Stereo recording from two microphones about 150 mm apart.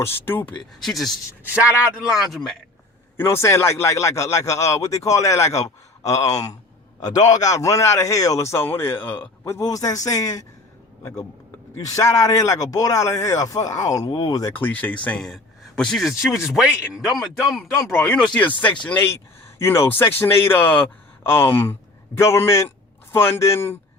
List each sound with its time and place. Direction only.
0.0 s speech: 15° left (ahead or behind)
0.8 s speech: centre (ahead or behind)
3.2 s speech: 15° left (ahead or behind)
11.7 s speech: 20° left (ahead or behind)
14.5 s speech: 10° left (ahead or behind)